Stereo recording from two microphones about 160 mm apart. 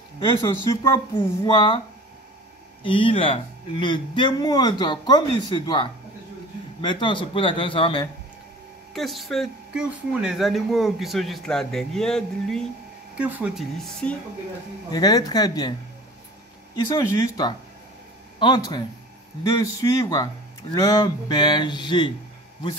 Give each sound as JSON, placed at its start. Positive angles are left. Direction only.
{"t": 0.4, "sound": "a man's voice", "side_deg": 20}
{"t": 1.1, "sound": "a man's voice", "side_deg": 30}
{"t": 2.8, "sound": "a man's voice", "side_deg": 35}
{"t": 8.9, "sound": "speech", "side_deg": 0}
{"t": 13.1, "sound": "speech", "side_deg": -10}
{"t": 14.9, "sound": "a man's voice", "side_deg": 25}
{"t": 16.8, "sound": "a man's voice", "side_deg": 20}